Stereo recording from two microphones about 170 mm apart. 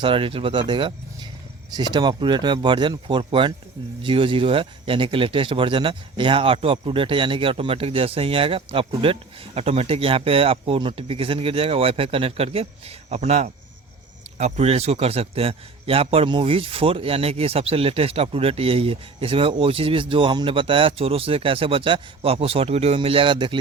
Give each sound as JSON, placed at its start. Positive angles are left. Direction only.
{"t": 0.0, "sound": "speech", "side_deg": -30}